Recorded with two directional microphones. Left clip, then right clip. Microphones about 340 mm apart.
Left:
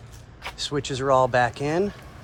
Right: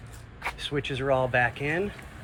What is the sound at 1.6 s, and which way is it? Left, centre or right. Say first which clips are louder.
Speech: left 4 dB; left.